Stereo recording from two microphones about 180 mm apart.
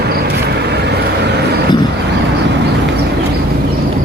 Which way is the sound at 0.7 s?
65° right (ahead or behind).